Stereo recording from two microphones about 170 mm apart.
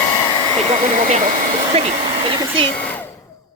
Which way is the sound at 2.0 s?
30° right (ahead or behind).